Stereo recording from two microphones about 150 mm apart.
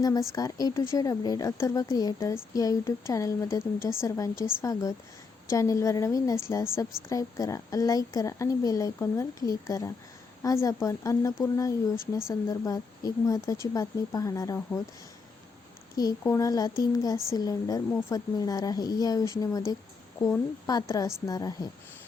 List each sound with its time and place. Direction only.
0.0 s speech: 25° left (ahead or behind)
16.0 s speech: 20° left (ahead or behind)